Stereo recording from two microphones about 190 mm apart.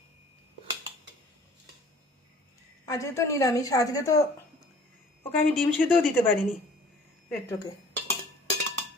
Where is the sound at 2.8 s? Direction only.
15° left (ahead or behind).